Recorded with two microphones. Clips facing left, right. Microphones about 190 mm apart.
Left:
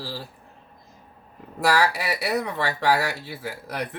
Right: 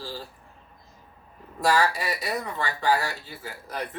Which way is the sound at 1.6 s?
70° left (ahead or behind).